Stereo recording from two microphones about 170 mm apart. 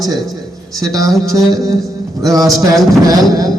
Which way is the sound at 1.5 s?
20° right (ahead or behind).